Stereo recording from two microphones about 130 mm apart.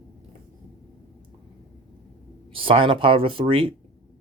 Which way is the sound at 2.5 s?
45° right (ahead or behind).